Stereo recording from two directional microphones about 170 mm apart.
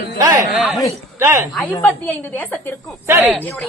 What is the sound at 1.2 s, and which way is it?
Speech, 15° right (ahead or behind).